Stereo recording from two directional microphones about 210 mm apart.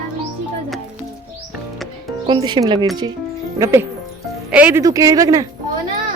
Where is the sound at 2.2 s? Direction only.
20° right (ahead or behind).